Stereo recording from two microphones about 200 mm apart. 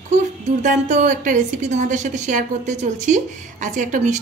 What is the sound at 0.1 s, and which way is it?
A woman's voice, 40° right (ahead or behind).